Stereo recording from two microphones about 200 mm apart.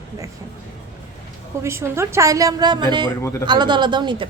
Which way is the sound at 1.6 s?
15° right (ahead or behind).